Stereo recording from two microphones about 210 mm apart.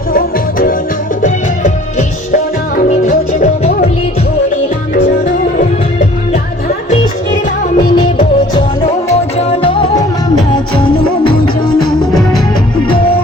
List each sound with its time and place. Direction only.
0.1 s music: 45° left (ahead or behind)
5.2 s music: 35° left (ahead or behind)
8.5 s music: 30° left (ahead or behind)
11.8 s music: centre (ahead or behind)